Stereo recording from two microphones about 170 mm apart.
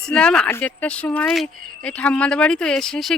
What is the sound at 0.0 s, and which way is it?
A woman's voice, 5° left (ahead or behind).